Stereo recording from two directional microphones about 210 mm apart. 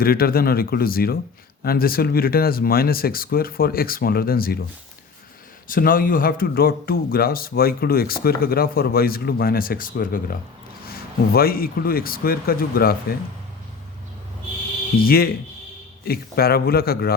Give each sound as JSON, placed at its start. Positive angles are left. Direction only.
{"t": 0.0, "sound": "speech", "side_deg": 45}
{"t": 5.6, "sound": "speech", "side_deg": 40}
{"t": 11.3, "sound": "speech", "side_deg": 45}
{"t": 15.0, "sound": "speech", "side_deg": 45}